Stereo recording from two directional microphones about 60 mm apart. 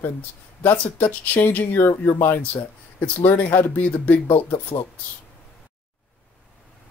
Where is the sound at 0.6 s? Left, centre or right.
Left.